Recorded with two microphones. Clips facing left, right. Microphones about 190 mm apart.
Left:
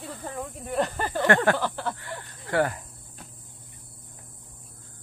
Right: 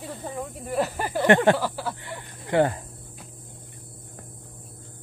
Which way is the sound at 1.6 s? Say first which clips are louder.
Even; 5° right (ahead or behind).